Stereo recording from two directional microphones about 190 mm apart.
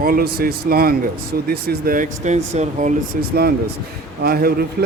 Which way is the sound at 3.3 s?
55° right (ahead or behind).